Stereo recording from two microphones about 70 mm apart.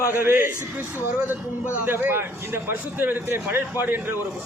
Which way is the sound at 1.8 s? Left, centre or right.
Right.